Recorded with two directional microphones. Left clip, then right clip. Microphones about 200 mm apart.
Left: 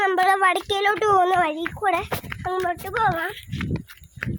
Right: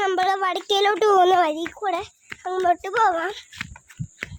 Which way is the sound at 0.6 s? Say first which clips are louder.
Right 2 dB; 10° right (ahead or behind).